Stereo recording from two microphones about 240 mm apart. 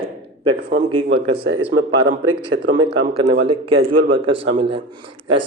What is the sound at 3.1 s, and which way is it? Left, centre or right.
A man's voice, right.